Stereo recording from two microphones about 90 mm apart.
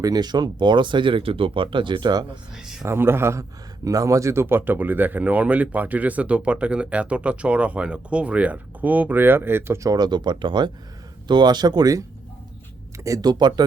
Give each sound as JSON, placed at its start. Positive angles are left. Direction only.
{"t": 0.0, "sound": "speech", "side_deg": -45}
{"t": 2.6, "sound": "speech", "side_deg": -5}
{"t": 2.8, "sound": "speech", "side_deg": -25}
{"t": 3.8, "sound": "speech", "side_deg": -40}
{"t": 9.9, "sound": "speech", "side_deg": -50}
{"t": 13.1, "sound": "speech", "side_deg": -50}